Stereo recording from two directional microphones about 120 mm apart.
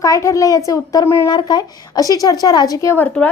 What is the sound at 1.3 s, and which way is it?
Speech, 35° left (ahead or behind).